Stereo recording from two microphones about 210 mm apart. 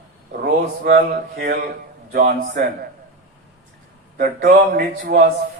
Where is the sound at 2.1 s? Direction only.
45° right (ahead or behind).